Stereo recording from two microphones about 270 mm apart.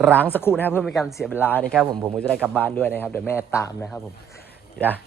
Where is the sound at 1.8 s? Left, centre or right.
Centre.